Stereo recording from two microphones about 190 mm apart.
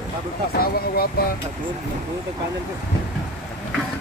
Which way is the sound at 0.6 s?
50° left (ahead or behind).